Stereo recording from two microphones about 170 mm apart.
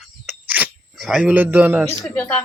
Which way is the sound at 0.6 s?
10° right (ahead or behind).